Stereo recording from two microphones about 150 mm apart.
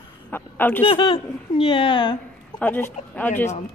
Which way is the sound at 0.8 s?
35° left (ahead or behind).